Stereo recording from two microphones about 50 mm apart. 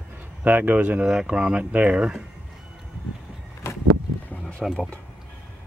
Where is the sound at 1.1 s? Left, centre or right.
Centre.